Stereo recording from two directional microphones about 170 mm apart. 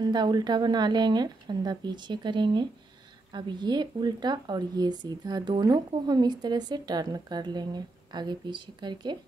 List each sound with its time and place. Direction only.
0.0 s speech: 25° right (ahead or behind)